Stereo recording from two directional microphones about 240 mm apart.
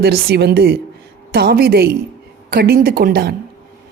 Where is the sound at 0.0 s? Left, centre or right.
Right.